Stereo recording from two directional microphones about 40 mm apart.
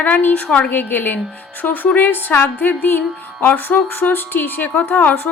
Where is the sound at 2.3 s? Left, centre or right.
Left.